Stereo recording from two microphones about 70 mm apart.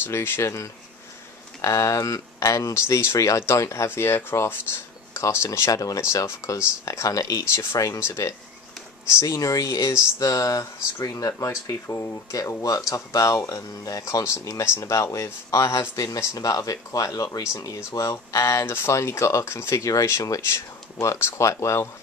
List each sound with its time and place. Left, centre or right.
0.0 s speech: left
2.7 s speech: left
5.7 s speech: left
18.1 s speech: left
21.0 s speech: left